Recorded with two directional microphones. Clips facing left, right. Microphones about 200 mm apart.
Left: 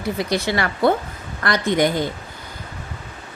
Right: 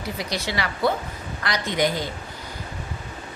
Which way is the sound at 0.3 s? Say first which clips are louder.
Left 6 dB; 50° left (ahead or behind).